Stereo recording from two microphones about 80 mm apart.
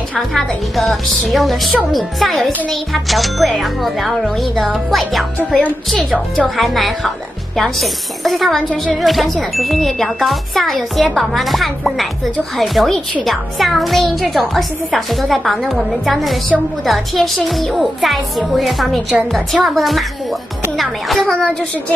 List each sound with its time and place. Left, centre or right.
0.3 s a child's voice: centre
5.4 s speech: centre
6.3 s a child's voice: centre